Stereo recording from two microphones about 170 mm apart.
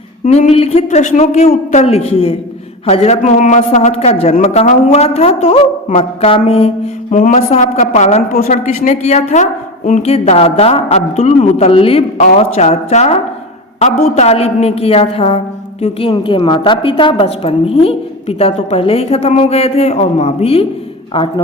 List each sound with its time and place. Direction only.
0.3 s a woman's voice: 40° left (ahead or behind)
7.1 s a woman's voice: 45° left (ahead or behind); by 21.4 s 30° left (ahead or behind)